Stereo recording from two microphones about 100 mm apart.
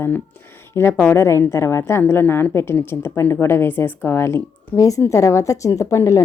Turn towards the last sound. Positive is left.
turn(degrees=30)  # may be behind; listen again after turning